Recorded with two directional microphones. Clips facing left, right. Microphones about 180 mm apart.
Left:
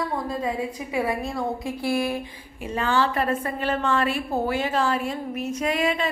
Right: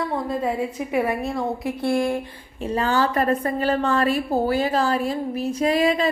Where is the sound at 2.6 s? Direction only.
35° right (ahead or behind).